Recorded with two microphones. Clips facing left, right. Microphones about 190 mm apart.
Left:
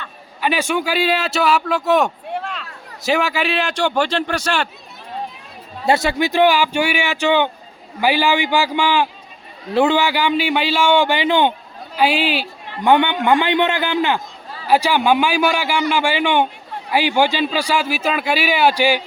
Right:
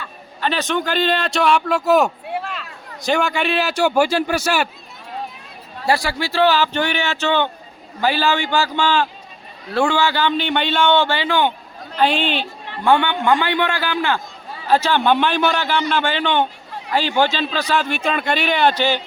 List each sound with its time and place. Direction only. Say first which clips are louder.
0.4 s speech: left 1 dB; 10° left (ahead or behind); by 4.7 s 10° right (ahead or behind)
5.8 s a man's voice: left 3 dB; 20° left (ahead or behind)
11.9 s a man's voice: left 1 dB; 5° left (ahead or behind)
12.8 s a man's voice: left 2 dB; 20° left (ahead or behind)